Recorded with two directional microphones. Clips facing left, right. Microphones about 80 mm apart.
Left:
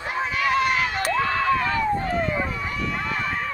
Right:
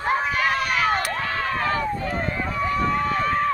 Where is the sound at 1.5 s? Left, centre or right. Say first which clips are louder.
Left 2 dB; right.